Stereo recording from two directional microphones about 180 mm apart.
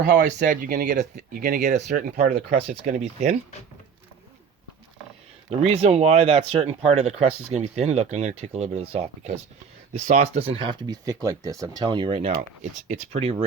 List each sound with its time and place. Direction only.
0.1 s speech: 70° right (ahead or behind)
0.4 s speech: 50° right (ahead or behind)
5.5 s speech: 35° right (ahead or behind)